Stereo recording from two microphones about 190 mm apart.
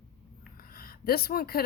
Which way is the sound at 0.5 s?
50° left (ahead or behind).